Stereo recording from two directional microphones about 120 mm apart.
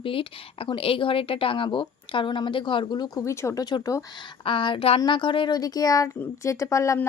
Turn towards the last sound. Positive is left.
turn(degrees=25)  # may be behind; listen again after turning